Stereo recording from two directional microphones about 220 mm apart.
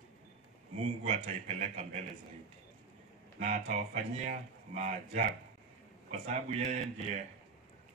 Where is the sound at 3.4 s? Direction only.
30° right (ahead or behind).